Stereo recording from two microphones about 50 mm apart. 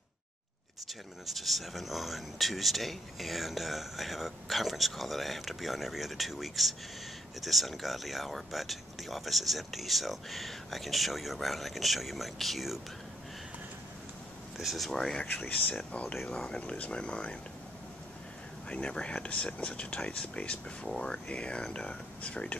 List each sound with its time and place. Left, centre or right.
1.2 s speech: centre
14.6 s speech: centre
14.9 s speech: centre
15.2 s speech: left
15.7 s speech: centre
18.7 s speech: centre